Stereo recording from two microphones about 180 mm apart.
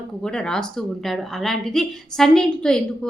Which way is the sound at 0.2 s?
5° left (ahead or behind).